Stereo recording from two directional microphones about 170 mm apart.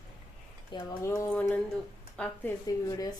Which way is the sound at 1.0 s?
15° left (ahead or behind).